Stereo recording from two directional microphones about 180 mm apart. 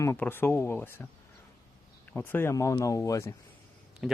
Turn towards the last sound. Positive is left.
turn(degrees=-5)  # may be behind; listen again after turning